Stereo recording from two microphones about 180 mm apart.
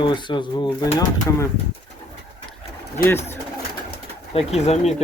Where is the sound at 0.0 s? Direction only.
25° left (ahead or behind).